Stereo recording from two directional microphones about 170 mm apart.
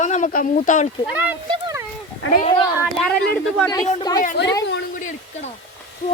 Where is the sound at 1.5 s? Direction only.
20° right (ahead or behind).